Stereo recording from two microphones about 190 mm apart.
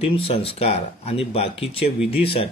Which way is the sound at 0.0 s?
30° left (ahead or behind).